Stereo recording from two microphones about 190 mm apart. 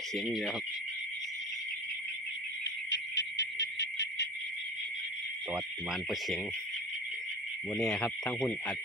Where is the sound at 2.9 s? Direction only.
65° left (ahead or behind).